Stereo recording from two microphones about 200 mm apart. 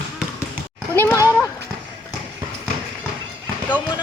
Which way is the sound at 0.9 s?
15° left (ahead or behind).